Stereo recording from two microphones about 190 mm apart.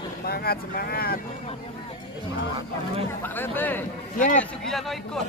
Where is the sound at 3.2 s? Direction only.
10° left (ahead or behind).